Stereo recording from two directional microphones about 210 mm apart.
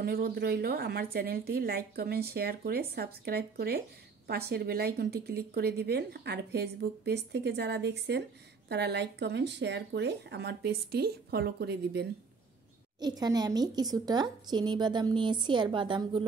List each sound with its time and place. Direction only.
0.0 s speech: 50° right (ahead or behind)
13.0 s a woman's voice: 20° right (ahead or behind)